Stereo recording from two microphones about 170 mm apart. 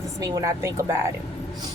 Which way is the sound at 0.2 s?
20° right (ahead or behind).